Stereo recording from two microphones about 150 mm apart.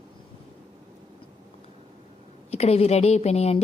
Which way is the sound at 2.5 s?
45° left (ahead or behind).